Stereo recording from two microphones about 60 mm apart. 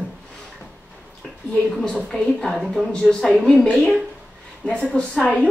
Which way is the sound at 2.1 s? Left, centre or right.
Centre.